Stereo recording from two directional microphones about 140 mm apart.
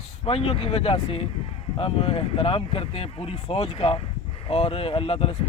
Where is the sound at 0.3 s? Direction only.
45° left (ahead or behind).